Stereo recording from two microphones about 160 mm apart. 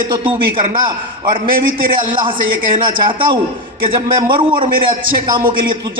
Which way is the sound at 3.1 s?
30° right (ahead or behind).